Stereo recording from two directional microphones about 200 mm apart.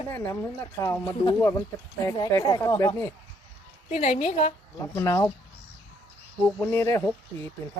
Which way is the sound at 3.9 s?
35° left (ahead or behind).